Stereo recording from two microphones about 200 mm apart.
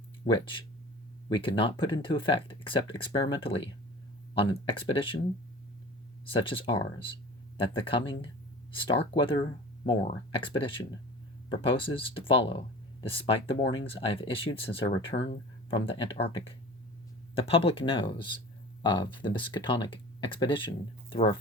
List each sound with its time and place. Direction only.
0.3 s speech: 25° left (ahead or behind)
6.3 s speech: 25° left (ahead or behind)
10.5 s speech: 25° left (ahead or behind)